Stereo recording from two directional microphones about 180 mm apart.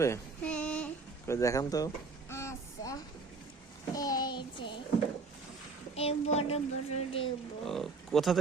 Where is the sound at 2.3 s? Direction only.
15° left (ahead or behind).